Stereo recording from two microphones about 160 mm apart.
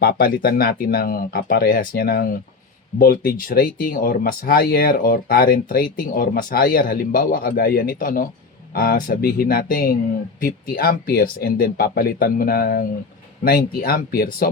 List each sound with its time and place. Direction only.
0.0 s speech: 70° left (ahead or behind)